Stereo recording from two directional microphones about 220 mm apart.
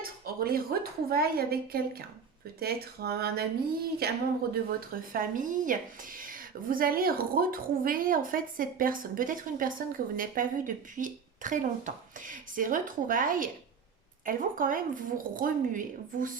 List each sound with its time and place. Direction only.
0.0 s a woman's voice: 40° right (ahead or behind)